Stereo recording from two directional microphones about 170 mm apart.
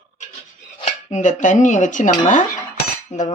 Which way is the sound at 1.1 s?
45° left (ahead or behind).